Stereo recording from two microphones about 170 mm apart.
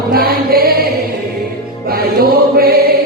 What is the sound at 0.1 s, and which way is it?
Music, 60° right (ahead or behind).